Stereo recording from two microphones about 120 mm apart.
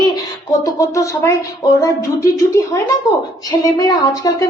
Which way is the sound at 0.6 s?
25° left (ahead or behind).